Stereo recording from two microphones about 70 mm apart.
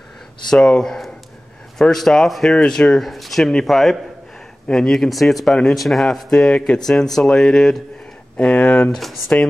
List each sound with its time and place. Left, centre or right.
0.5 s speech: centre
8.4 s speech: centre
8.9 s speech: centre